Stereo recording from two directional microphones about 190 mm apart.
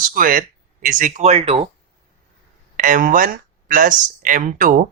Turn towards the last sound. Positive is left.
turn(degrees=-45)  # may be behind; listen again after turning